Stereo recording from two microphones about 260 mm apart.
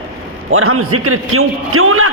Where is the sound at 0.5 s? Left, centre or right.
Right.